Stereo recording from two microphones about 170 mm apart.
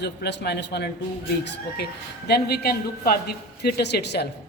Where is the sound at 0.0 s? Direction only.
90° left; by 3.2 s 65° left (ahead or behind).